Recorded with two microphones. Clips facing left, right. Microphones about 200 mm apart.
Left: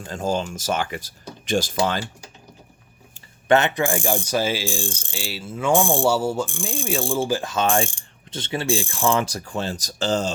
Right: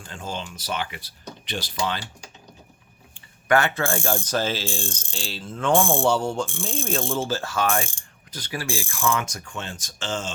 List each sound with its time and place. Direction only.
0.1 s speech: 40° left (ahead or behind)
3.5 s mechanisms: 20° left (ahead or behind)
8.3 s speech: 25° left (ahead or behind)